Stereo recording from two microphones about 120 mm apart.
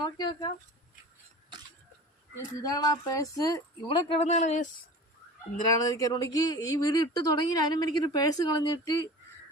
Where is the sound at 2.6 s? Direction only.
30° left (ahead or behind).